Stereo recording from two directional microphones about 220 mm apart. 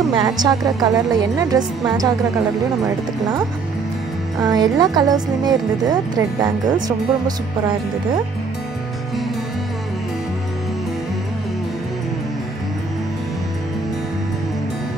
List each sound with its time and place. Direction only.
0.1 s a woman's voice: 20° right (ahead or behind)
4.4 s a woman's voice: 15° right (ahead or behind)